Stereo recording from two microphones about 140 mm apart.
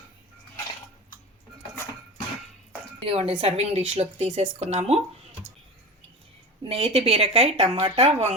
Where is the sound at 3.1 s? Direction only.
40° right (ahead or behind).